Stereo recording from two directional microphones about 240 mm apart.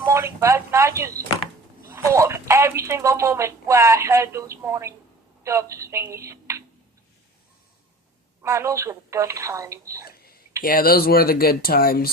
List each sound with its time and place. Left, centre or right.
0.0 s a woman's voice: centre
8.4 s speech: centre
10.1 s a sound: left
10.6 s speech: left